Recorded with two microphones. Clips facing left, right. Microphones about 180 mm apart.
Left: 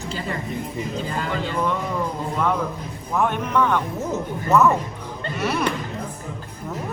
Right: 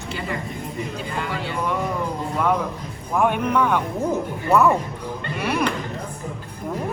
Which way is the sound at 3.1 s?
10° right (ahead or behind).